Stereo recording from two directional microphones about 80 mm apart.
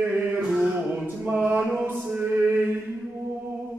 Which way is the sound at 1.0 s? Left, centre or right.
Right.